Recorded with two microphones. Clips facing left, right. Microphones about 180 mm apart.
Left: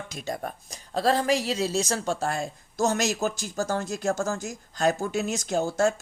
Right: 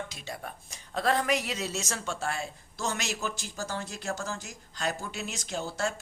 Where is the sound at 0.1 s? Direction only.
45° left (ahead or behind).